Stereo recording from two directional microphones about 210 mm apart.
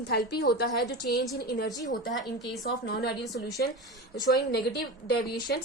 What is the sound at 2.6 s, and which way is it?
A woman's voice, 50° left (ahead or behind).